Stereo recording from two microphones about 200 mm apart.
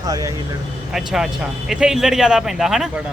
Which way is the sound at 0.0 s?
15° right (ahead or behind).